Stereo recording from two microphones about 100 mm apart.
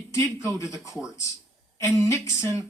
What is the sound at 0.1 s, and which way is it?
Speech, 30° left (ahead or behind).